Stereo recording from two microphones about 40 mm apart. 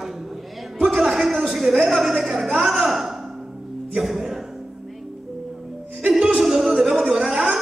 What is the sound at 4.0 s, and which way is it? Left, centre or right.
Music, centre.